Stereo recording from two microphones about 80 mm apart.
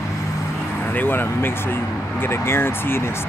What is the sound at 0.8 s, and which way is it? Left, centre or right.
Speech, left.